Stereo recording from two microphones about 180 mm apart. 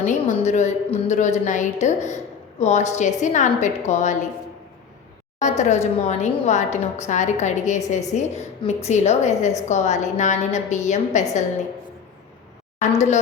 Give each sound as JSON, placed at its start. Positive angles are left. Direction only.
{"t": 0.0, "sound": "a woman's voice", "side_deg": 40}
{"t": 5.4, "sound": "a woman's voice", "side_deg": 40}
{"t": 12.8, "sound": "a woman's voice", "side_deg": 40}